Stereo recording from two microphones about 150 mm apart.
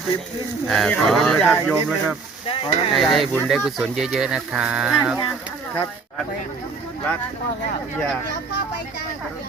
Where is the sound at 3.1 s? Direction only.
Centre (ahead or behind).